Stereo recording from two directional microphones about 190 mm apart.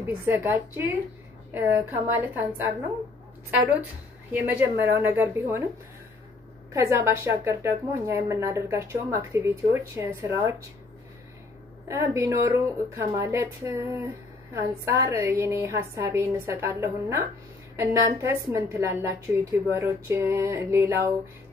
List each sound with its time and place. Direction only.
0.0 s a woman's voice: 10° right (ahead or behind)
3.8 s a woman's voice: 10° right (ahead or behind)
6.7 s a woman's voice: 15° right (ahead or behind)
11.9 s a woman's voice: 15° right (ahead or behind)